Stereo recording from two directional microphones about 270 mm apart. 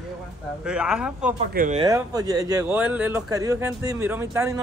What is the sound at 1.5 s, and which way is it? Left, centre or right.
Speech, right.